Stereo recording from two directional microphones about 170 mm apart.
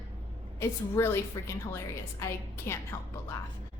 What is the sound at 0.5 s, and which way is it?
A woman's voice, 15° left (ahead or behind).